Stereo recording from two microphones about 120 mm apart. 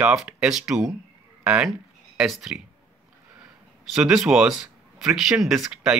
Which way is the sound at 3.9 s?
5° right (ahead or behind).